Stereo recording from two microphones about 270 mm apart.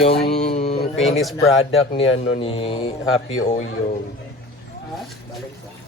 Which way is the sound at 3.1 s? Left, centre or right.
Left.